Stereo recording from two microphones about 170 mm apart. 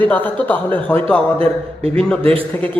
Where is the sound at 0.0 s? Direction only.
10° left (ahead or behind).